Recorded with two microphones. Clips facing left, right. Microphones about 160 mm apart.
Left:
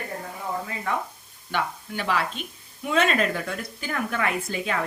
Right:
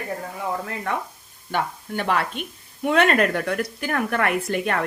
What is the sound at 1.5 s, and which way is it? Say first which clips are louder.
A woman's voice: right 2 dB; 50° right (ahead or behind).